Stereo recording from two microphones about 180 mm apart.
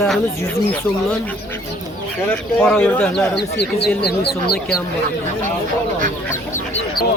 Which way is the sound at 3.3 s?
65° left (ahead or behind).